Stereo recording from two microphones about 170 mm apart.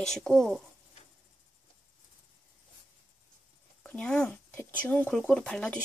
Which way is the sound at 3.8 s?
10° left (ahead or behind).